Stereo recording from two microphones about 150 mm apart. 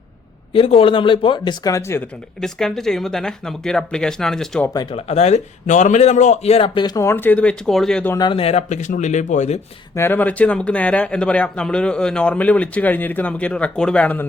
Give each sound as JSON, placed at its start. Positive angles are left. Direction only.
{"t": 0.5, "sound": "a man's voice", "side_deg": 40}
{"t": 2.4, "sound": "speech", "side_deg": 5}
{"t": 4.7, "sound": "speech", "side_deg": 25}
{"t": 4.9, "sound": "a man's voice", "side_deg": 45}
{"t": 8.1, "sound": "speech", "side_deg": 30}
{"t": 9.9, "sound": "speech", "side_deg": 15}